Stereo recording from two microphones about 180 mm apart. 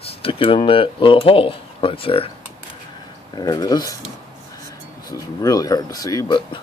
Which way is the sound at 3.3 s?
20° left (ahead or behind).